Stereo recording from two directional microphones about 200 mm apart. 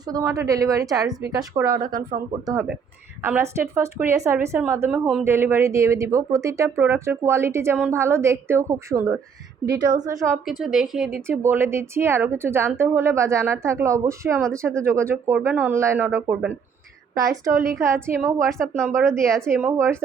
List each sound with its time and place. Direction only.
0.1 s a woman's voice: 15° right (ahead or behind)
10.4 s a woman's voice: centre (ahead or behind)
19.2 s a woman's voice: centre (ahead or behind)
19.7 s speech: 15° right (ahead or behind)